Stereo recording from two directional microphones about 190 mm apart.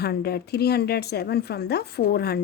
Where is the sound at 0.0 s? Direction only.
55° left (ahead or behind).